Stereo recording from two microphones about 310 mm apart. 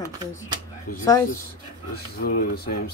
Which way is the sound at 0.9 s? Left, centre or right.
Left.